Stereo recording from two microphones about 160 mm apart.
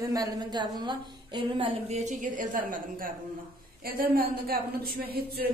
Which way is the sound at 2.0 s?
50° right (ahead or behind).